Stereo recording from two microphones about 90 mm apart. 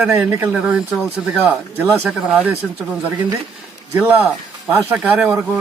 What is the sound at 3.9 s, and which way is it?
Speech, 15° right (ahead or behind).